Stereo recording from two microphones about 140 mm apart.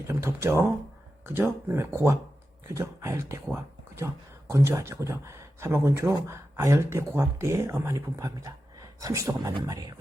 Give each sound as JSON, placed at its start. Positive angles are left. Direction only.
{"t": 0.1, "sound": "speech", "side_deg": -20}